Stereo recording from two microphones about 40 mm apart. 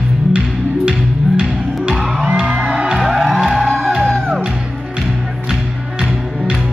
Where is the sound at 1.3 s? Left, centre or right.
Centre.